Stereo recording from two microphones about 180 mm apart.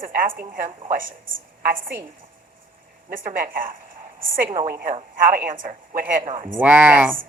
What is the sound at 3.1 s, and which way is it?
A woman's voice, 50° right (ahead or behind).